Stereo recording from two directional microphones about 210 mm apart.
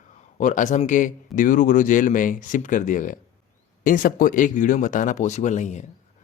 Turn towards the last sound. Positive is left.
turn(degrees=35)  # may be behind; listen again after turning